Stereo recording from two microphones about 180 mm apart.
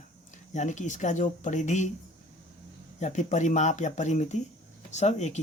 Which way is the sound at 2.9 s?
40° left (ahead or behind).